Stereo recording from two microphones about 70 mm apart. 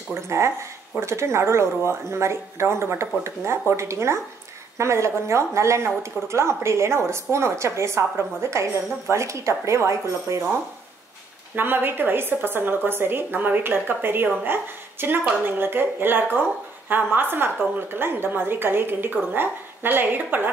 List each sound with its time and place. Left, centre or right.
0.1 s a woman's voice: right
11.5 s a woman's voice: right